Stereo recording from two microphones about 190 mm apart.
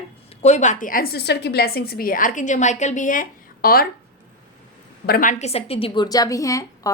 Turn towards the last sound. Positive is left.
turn(degrees=15)  # may be behind; listen again after turning